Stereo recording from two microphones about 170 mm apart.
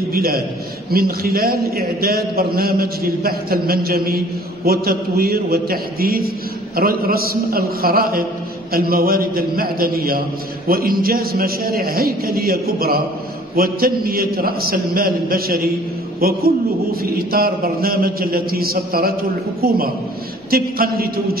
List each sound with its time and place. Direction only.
0.1 s a man's voice: 60° right (ahead or behind)
20.5 s a man's voice: 60° right (ahead or behind)